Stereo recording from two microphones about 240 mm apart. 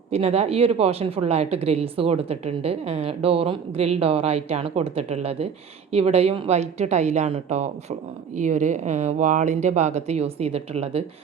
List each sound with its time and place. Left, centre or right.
0.1 s a woman's voice: right